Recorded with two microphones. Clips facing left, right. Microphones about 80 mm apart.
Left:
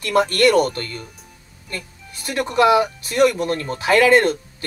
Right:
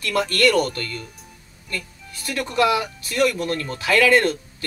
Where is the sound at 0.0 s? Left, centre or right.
Left.